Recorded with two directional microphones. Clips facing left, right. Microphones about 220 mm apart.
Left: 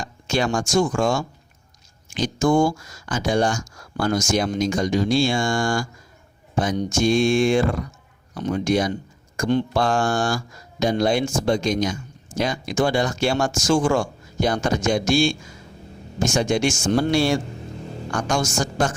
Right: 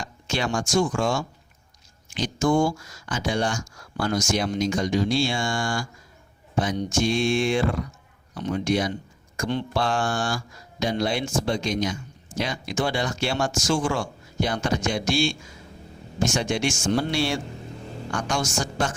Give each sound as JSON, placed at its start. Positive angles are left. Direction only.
{"t": 0.0, "sound": "speech", "side_deg": 45}